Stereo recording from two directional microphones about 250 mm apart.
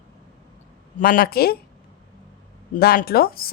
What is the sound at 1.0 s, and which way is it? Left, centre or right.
Speech, left.